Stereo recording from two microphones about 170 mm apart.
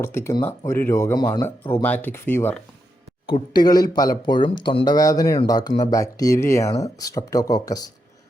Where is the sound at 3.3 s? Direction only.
25° left (ahead or behind).